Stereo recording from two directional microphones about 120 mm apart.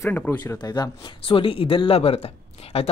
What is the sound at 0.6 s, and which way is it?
A man's voice, 40° left (ahead or behind).